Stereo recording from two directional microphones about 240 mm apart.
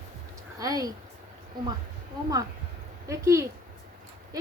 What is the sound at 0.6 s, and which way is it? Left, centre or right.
Speech, centre.